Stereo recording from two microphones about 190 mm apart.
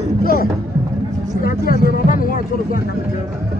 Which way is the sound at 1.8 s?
50° left (ahead or behind).